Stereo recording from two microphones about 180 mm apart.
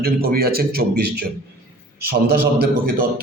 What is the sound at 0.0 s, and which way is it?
A man's voice, 55° right (ahead or behind).